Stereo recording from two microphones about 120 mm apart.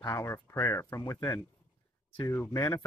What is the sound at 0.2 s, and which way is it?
Speech, 25° left (ahead or behind).